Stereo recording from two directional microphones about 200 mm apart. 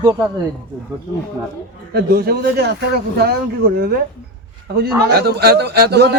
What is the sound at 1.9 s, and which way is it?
A man's voice, 50° right (ahead or behind).